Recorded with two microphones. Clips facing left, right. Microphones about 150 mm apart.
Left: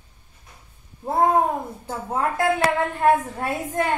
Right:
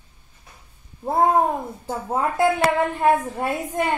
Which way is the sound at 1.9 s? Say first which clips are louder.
Right 1 dB; 15° right (ahead or behind).